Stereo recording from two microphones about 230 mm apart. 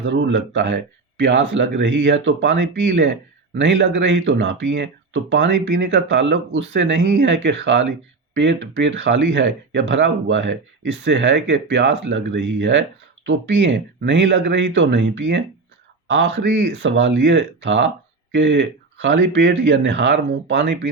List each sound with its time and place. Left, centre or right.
0.0 s speech: right